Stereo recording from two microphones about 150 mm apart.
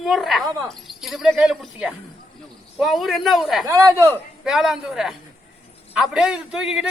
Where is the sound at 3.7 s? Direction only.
20° right (ahead or behind).